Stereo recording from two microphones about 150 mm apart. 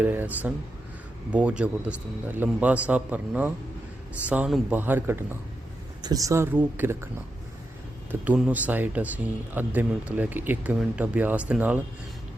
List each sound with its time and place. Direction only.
0.0 s speech: 10° right (ahead or behind)
6.0 s speech: 25° right (ahead or behind)
8.2 s speech: 10° right (ahead or behind)